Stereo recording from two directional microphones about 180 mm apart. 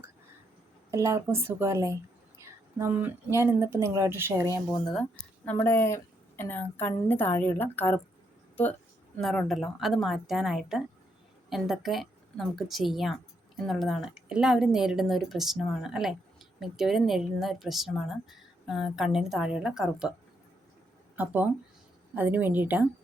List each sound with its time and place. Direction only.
0.9 s speech: 15° right (ahead or behind)
5.5 s a woman's voice: 15° left (ahead or behind)
9.1 s a woman's voice: 5° left (ahead or behind)
21.2 s speech: 10° right (ahead or behind)